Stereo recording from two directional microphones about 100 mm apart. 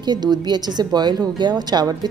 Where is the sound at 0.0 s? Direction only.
45° right (ahead or behind).